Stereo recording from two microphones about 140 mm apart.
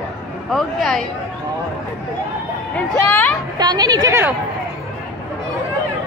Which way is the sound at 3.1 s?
15° left (ahead or behind).